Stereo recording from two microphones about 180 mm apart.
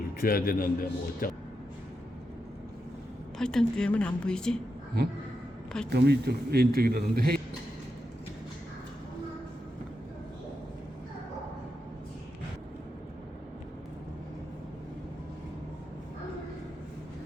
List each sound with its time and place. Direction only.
0.2 s a man's voice: 55° left (ahead or behind)
3.3 s a woman's voice: 5° left (ahead or behind)
5.9 s a man's voice: 65° right (ahead or behind)